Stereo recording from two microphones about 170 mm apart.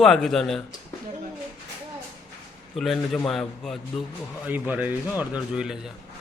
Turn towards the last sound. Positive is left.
turn(degrees=-5)  # may be behind; listen again after turning